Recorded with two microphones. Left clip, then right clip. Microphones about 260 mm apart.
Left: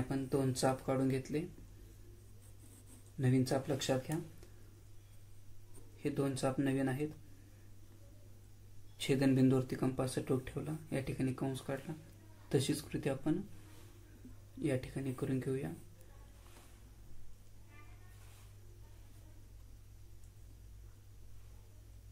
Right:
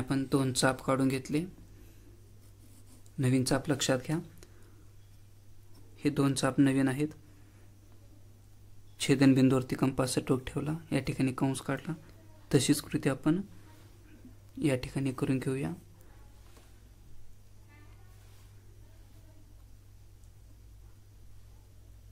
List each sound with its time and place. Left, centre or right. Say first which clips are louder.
0.1 s speech: right 7 dB; right
3.2 s speech: right 5 dB; right
6.0 s speech: right 6 dB; right
9.0 s speech: right 7 dB; right
14.6 s speech: right 7 dB; right